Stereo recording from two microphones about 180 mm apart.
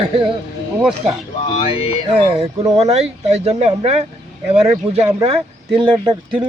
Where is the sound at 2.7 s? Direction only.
35° right (ahead or behind).